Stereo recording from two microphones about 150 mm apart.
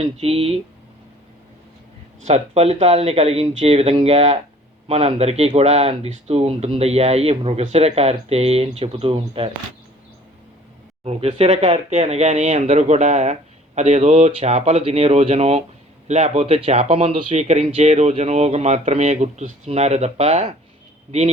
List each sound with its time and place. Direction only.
0.0 s speech: 40° right (ahead or behind)
2.2 s speech: 50° right (ahead or behind)
11.0 s speech: 40° right (ahead or behind)